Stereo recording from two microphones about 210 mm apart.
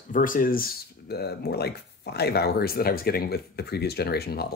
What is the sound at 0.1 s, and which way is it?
Speech, 40° left (ahead or behind).